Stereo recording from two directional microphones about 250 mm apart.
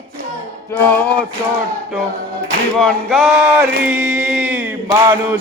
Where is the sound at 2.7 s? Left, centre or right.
Centre.